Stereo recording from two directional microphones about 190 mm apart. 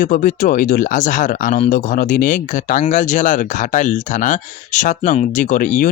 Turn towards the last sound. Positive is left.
turn(degrees=45)  # may be behind; listen again after turning